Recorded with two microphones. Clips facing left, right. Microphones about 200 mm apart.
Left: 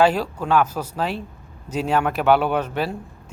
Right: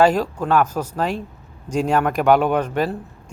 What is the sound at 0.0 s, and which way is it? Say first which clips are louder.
Speech: right 2 dB; 5° left (ahead or behind).